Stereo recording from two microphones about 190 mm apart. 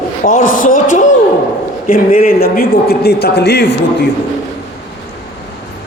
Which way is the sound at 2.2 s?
55° left (ahead or behind).